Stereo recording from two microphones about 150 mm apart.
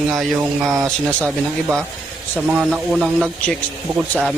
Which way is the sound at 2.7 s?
5° right (ahead or behind).